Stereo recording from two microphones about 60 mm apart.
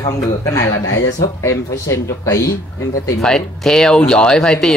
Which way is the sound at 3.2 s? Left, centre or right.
Centre.